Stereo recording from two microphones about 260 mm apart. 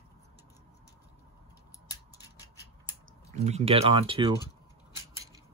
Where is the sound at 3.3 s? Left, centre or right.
Right.